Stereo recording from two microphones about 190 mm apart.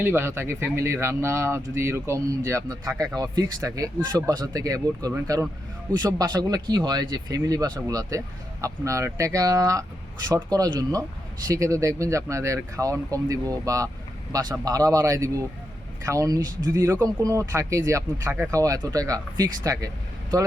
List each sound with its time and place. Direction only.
0.0 s speech: 10° right (ahead or behind)